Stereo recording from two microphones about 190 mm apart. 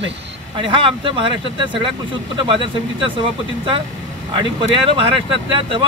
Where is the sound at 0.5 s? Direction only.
25° right (ahead or behind).